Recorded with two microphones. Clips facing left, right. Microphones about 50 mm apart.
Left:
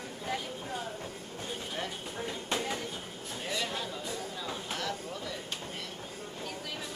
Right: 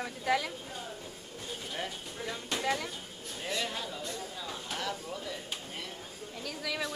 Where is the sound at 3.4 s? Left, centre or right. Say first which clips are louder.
Even; centre.